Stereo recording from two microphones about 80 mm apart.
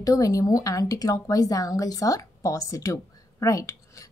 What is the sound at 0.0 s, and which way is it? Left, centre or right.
A woman's voice, left.